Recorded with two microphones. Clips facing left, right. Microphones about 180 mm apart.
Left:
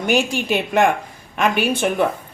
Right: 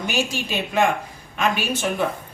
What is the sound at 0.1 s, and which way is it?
Speech, 55° left (ahead or behind).